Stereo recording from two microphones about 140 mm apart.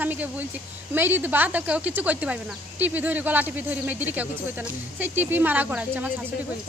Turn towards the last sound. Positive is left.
turn(degrees=-10)  # may be behind; listen again after turning